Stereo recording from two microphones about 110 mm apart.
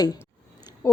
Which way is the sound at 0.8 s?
35° left (ahead or behind).